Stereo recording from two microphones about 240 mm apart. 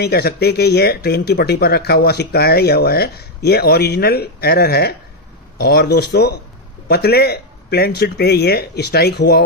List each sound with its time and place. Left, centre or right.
0.0 s speech: left